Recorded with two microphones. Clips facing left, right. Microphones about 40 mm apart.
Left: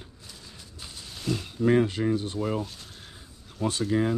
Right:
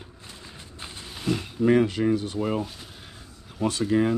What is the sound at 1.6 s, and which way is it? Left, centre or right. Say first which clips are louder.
Speech: right 2 dB; right.